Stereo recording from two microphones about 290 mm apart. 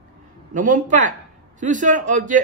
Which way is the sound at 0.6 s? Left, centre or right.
Right.